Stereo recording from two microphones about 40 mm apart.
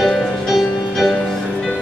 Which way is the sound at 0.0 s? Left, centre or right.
Centre.